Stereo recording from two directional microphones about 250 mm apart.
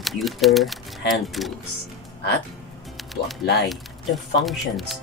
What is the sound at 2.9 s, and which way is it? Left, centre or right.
Speech, centre.